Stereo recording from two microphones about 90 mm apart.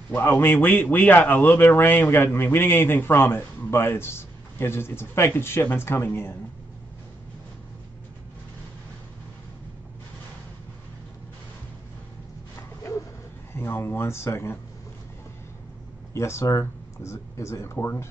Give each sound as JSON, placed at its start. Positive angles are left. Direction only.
{"t": 0.1, "sound": "a man's voice", "side_deg": 25}
{"t": 13.5, "sound": "a man's voice", "side_deg": 30}
{"t": 16.1, "sound": "speech", "side_deg": 30}